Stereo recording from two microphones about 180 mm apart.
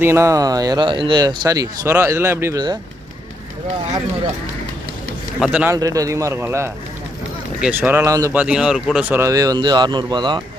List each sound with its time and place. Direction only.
0.0 s speech: 15° right (ahead or behind)
5.4 s a man's voice: 5° right (ahead or behind)
5.7 s speech: 20° right (ahead or behind)